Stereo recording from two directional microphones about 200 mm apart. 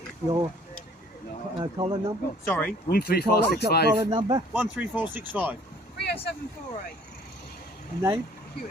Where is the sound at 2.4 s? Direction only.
10° left (ahead or behind).